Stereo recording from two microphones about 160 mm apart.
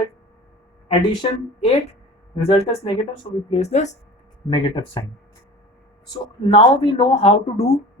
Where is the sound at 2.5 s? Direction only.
35° left (ahead or behind).